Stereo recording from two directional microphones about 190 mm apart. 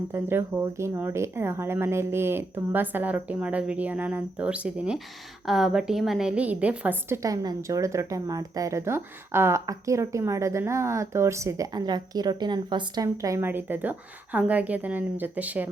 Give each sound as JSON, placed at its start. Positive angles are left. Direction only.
{"t": 0.1, "sound": "a woman's voice", "side_deg": -10}